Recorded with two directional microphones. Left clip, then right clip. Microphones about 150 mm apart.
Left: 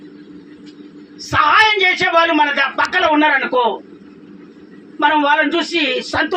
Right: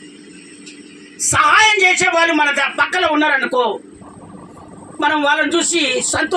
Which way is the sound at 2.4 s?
10° right (ahead or behind).